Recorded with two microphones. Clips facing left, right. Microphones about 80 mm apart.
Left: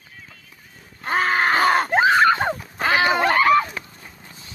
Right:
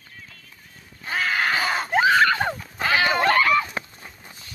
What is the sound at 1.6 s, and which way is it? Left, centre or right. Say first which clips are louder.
Screaming: left 7 dB; left.